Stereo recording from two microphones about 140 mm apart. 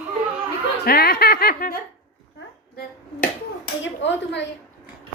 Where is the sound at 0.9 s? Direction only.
90° left.